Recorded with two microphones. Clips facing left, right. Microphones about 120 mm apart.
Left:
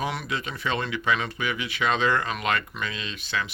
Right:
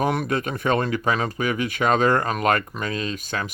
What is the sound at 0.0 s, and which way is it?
Speech, 50° right (ahead or behind).